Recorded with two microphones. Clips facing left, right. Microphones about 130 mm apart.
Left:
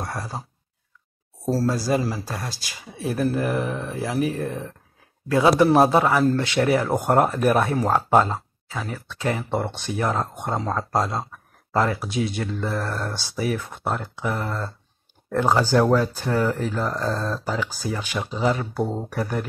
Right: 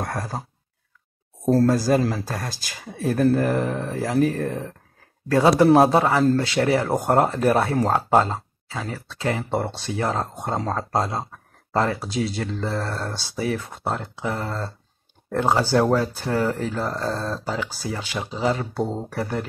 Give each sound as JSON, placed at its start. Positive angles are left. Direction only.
{"t": 0.0, "sound": "speech", "side_deg": -50}
{"t": 1.4, "sound": "speech", "side_deg": 5}
{"t": 1.7, "sound": "speech", "side_deg": -50}
{"t": 5.6, "sound": "speech", "side_deg": -35}